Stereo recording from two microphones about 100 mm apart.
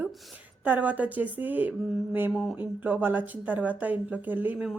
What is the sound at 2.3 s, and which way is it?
Speech, centre (ahead or behind).